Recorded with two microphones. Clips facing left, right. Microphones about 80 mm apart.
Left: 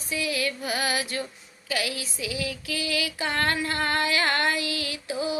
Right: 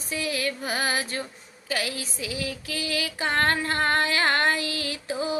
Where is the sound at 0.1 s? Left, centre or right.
Right.